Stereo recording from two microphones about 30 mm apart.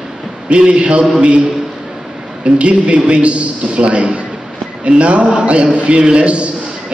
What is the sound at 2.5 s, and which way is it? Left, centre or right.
A man's voice, right.